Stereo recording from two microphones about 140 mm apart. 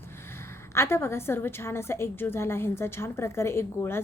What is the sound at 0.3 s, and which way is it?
A woman's voice, 20° left (ahead or behind).